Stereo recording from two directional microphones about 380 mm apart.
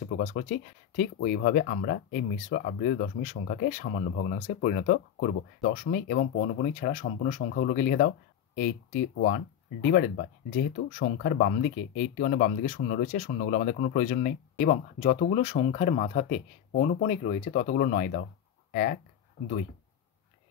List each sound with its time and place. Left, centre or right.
0.2 s speech: centre